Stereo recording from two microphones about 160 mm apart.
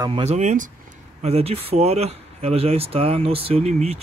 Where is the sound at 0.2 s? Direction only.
45° right (ahead or behind).